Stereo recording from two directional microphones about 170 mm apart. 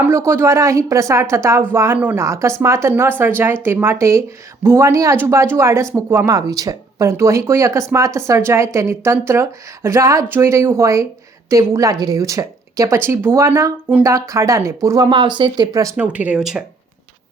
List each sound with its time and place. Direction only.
0.0 s speech: 15° right (ahead or behind)